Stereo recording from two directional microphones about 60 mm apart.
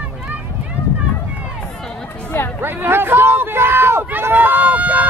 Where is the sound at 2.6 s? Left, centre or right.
Right.